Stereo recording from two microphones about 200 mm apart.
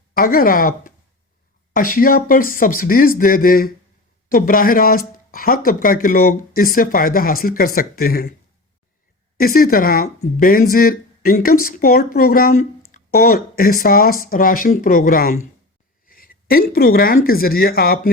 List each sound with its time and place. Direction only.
0.1 s speech: 45° left (ahead or behind)
9.4 s speech: 45° left (ahead or behind)
16.0 s a sound: 45° left (ahead or behind)
17.2 s speech: 50° left (ahead or behind)